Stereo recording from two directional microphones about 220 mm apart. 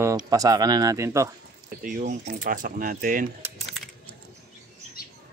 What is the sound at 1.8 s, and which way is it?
Speech, 40° right (ahead or behind).